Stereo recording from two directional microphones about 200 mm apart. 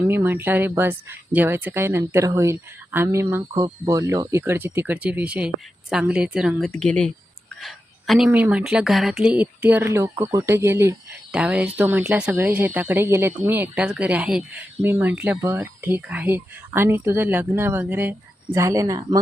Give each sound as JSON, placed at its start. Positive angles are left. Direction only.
{"t": 0.1, "sound": "a woman's voice", "side_deg": -10}